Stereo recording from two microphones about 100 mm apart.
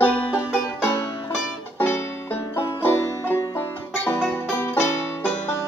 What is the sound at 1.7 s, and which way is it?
Music, 20° left (ahead or behind).